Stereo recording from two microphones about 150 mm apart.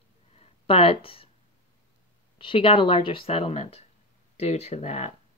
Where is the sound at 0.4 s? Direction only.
40° left (ahead or behind).